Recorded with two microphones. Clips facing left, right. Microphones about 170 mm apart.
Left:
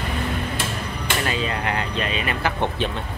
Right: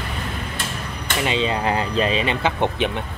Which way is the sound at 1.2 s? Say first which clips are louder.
Right 6 dB; 25° right (ahead or behind).